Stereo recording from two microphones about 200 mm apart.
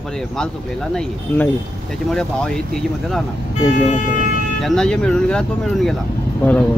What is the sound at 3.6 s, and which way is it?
Speech, 35° left (ahead or behind).